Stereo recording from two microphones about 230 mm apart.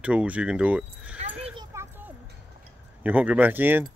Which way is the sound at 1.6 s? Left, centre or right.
Centre.